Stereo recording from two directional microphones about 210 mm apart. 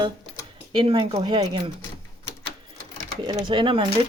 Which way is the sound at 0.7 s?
25° right (ahead or behind).